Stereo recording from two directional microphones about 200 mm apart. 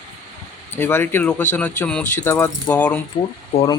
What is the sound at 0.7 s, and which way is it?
Speech, 10° left (ahead or behind).